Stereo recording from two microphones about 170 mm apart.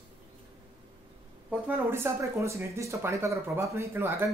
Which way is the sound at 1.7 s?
15° right (ahead or behind).